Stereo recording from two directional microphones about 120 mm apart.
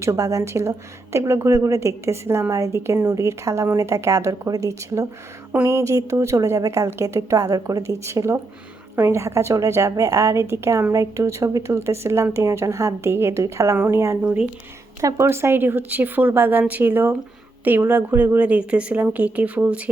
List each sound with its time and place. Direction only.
0.0 s a woman's voice: 25° right (ahead or behind)